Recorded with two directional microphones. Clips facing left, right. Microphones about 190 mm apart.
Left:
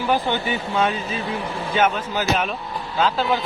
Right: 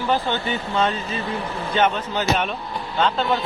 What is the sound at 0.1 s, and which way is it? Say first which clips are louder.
Speech: left 1 dB; 10° left (ahead or behind).